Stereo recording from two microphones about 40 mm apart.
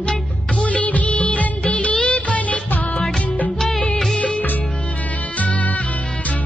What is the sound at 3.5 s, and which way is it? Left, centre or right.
Music of bollywood, centre.